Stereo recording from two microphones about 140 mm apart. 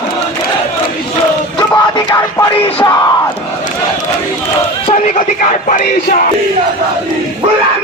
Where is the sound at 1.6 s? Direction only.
30° left (ahead or behind).